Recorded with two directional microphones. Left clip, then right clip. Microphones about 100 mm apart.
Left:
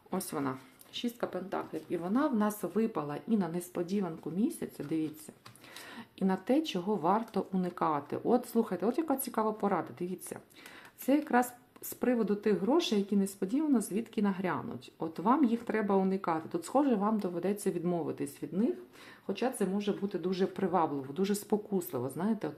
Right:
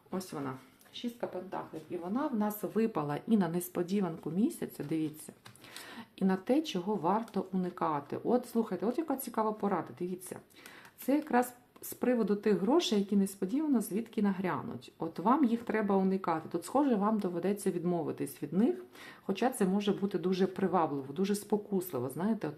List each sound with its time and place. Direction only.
0.1 s speech: 35° left (ahead or behind)
1.5 s speech: 75° left (ahead or behind)
2.4 s speech: 35° left (ahead or behind)
2.9 s speech: 20° right (ahead or behind)
13.1 s speech: centre (ahead or behind)
19.3 s speech: 40° right (ahead or behind)
20.1 s speech: 30° right (ahead or behind)
20.4 s speech: 5° right (ahead or behind)
21.2 s speech: 10° left (ahead or behind)
21.5 s speech: centre (ahead or behind)